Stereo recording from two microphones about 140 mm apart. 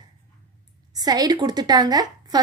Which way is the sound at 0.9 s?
25° right (ahead or behind).